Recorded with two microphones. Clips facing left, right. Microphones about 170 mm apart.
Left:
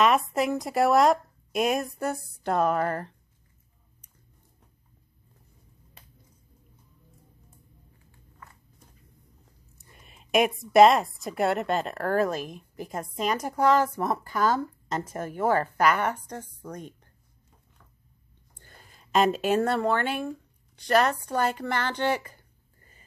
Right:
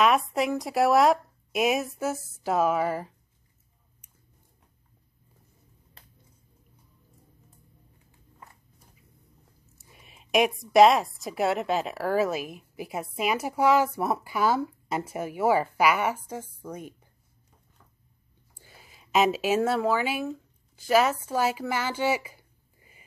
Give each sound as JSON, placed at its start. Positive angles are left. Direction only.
{"t": 0.0, "sound": "speech", "side_deg": 0}
{"t": 9.8, "sound": "a woman's voice", "side_deg": -5}
{"t": 18.5, "sound": "speech", "side_deg": -5}